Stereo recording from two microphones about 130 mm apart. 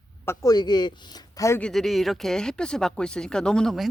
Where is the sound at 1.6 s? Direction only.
Centre (ahead or behind).